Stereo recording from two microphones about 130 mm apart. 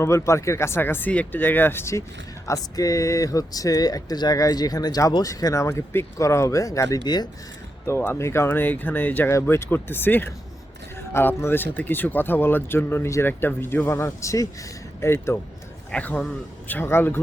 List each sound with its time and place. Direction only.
0.0 s speech: 20° left (ahead or behind)
7.9 s speech: 20° left (ahead or behind)